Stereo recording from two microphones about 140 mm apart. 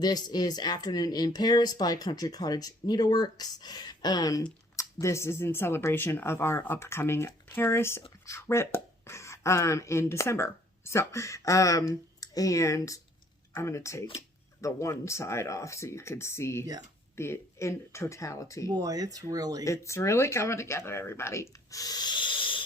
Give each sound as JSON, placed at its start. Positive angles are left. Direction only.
{"t": 0.0, "sound": "speech", "side_deg": 30}
{"t": 18.7, "sound": "speech", "side_deg": -25}
{"t": 19.6, "sound": "speech", "side_deg": 20}